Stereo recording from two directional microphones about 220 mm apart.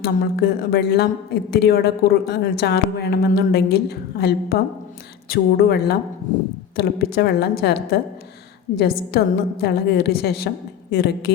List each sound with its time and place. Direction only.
0.0 s a woman's voice: 45° left (ahead or behind)